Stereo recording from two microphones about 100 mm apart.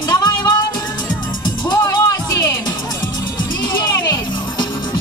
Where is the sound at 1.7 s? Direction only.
35° left (ahead or behind).